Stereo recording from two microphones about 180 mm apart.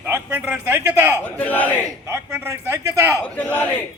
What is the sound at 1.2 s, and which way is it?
Crowd, 10° left (ahead or behind).